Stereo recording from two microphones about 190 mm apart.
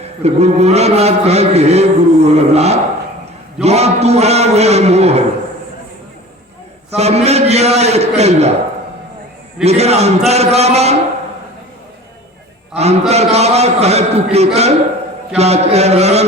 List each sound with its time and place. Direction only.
0.2 s a man's voice: 35° right (ahead or behind)
6.9 s a man's voice: 35° right (ahead or behind)
9.6 s a man's voice: 35° right (ahead or behind)
12.7 s a man's voice: 35° right (ahead or behind)